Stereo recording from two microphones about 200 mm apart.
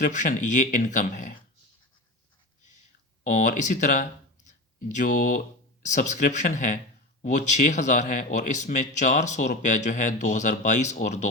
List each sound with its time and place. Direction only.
0.0 s a man's voice: 40° left (ahead or behind)
3.2 s a man's voice: 40° left (ahead or behind)
4.4 s a sound: 40° left (ahead or behind)
5.8 s a man's voice: 40° left (ahead or behind)